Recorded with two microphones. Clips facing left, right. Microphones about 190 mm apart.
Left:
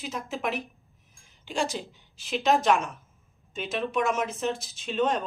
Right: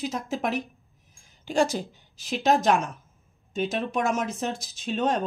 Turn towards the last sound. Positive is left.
turn(degrees=-40)  # may be behind; listen again after turning